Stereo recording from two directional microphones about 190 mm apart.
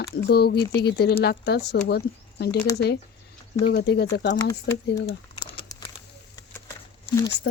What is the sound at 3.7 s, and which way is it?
Speech, 60° left (ahead or behind).